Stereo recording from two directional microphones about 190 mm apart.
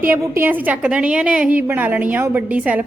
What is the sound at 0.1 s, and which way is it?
A woman's voice, 10° right (ahead or behind).